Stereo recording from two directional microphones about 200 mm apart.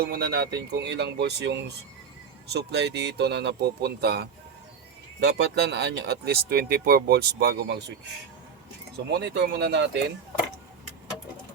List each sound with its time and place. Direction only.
0.0 s speech: 50° right (ahead or behind)
9.1 s speech: 60° right (ahead or behind)